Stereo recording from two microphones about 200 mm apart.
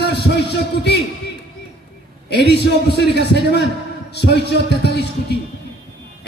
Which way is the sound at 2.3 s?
55° left (ahead or behind).